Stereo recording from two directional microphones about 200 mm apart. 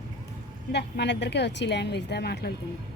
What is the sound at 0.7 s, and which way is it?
A woman's voice, 55° left (ahead or behind).